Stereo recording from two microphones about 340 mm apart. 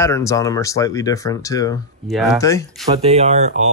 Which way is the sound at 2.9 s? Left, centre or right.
Centre.